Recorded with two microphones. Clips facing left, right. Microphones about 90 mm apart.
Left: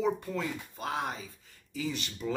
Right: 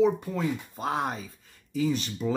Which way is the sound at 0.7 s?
40° right (ahead or behind).